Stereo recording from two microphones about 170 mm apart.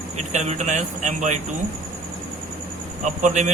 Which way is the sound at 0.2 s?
40° right (ahead or behind).